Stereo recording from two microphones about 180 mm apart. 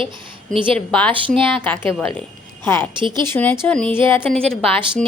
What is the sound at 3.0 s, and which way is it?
Speech, 25° right (ahead or behind).